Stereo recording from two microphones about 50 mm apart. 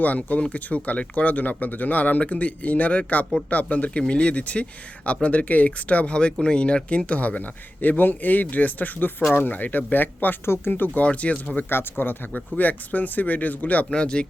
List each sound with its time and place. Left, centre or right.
0.0 s speech: left
11.0 s speech: left
11.7 s speech: left
12.5 s speech: left
13.9 s speech: centre